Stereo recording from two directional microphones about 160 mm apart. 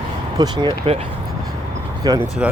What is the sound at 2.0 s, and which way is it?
Speech, 25° right (ahead or behind).